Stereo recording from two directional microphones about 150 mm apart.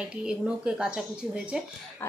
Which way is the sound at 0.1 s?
5° right (ahead or behind).